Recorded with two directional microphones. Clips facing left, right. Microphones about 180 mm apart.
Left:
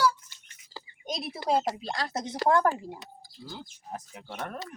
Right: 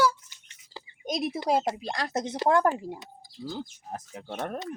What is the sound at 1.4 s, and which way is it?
A woman's voice, 20° right (ahead or behind).